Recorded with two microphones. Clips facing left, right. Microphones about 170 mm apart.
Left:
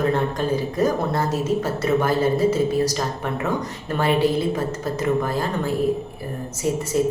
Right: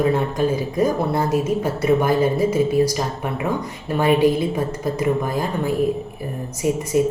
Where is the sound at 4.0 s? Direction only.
15° right (ahead or behind).